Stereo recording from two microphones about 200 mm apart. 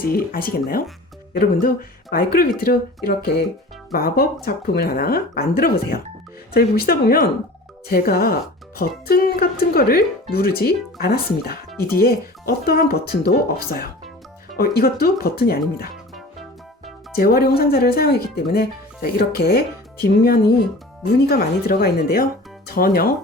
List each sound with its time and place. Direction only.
0.0 s speech: 50° left (ahead or behind)
16.1 s music: centre (ahead or behind)
17.2 s speech: 50° left (ahead or behind)